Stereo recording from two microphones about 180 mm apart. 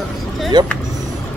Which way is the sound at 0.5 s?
25° right (ahead or behind).